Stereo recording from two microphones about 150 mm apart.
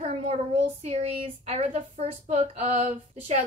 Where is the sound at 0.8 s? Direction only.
55° right (ahead or behind).